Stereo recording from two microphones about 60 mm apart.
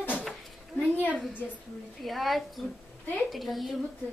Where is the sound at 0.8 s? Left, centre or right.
Left.